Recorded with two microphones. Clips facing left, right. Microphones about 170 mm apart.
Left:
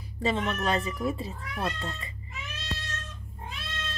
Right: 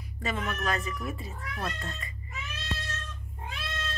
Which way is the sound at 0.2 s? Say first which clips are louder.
Left 4 dB; 30° left (ahead or behind).